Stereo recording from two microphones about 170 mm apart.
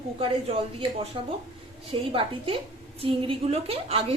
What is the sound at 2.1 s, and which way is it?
A woman's voice, 35° right (ahead or behind).